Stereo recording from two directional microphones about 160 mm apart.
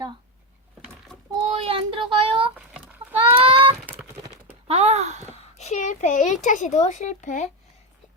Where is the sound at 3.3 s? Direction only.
35° right (ahead or behind).